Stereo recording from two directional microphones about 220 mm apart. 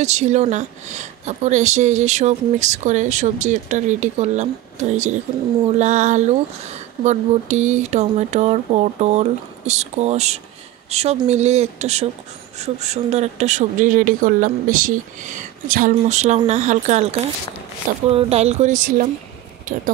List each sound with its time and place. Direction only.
0.0 s speech: 30° right (ahead or behind)